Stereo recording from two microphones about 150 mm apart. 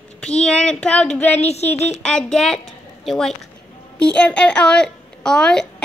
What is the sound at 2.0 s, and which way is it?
A child's voice, 5° left (ahead or behind).